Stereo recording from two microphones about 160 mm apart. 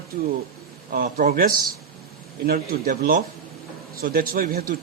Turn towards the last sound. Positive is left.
turn(degrees=-65)  # may be behind; listen again after turning